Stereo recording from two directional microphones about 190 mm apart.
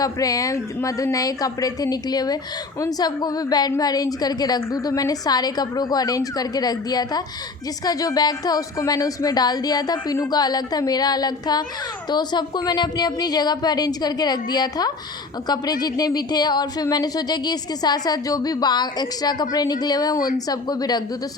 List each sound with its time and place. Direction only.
0.0 s speech: 20° left (ahead or behind)